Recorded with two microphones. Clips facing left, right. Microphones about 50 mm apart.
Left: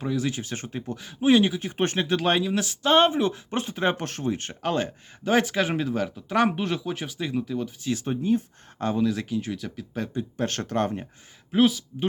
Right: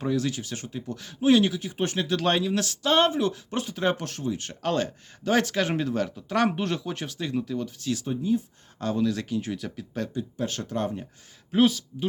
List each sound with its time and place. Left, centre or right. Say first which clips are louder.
0.0 s speech: right 1 dB; centre
0.3 s speech: left 1 dB; left
0.9 s speech: left 1 dB; centre
1.6 s speech: left 2 dB; left
2.2 s speech: left 1 dB; centre; by 4.5 s left
4.6 s speech: even; centre
8.0 s speech: left 2 dB; left
9.0 s speech: even; centre
9.4 s speech: even; centre
10.3 s speech: left 5 dB; left
11.5 s speech: left 1 dB; centre